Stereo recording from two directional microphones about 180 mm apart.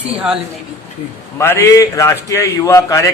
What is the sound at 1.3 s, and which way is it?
A man's voice, 15° left (ahead or behind).